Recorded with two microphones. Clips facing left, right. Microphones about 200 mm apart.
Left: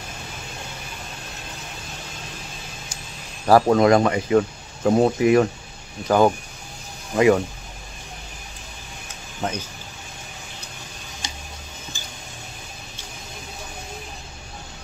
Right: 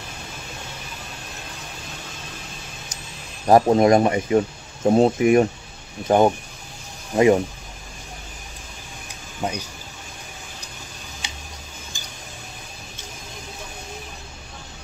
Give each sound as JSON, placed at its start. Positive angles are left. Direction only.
{"t": 3.4, "sound": "speech", "side_deg": -20}
{"t": 9.4, "sound": "speech", "side_deg": -15}